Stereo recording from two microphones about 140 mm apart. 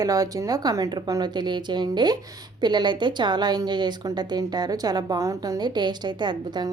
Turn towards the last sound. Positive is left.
turn(degrees=-30)  # may be behind; listen again after turning